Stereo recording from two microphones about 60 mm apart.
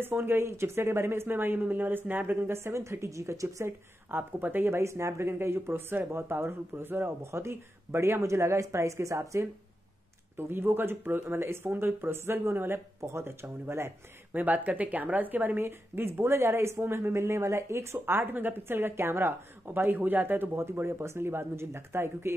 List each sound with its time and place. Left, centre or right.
0.0 s speech: right
3.6 s a woman's voice: right
4.7 s speech: right
7.2 s speech: right
10.3 s a woman's voice: right
13.0 s speech: right
14.3 s a woman's voice: right
20.5 s speech: right